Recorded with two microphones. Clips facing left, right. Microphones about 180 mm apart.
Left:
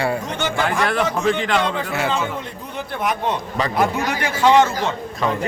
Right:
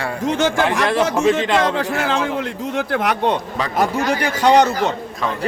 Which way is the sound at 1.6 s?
90° right.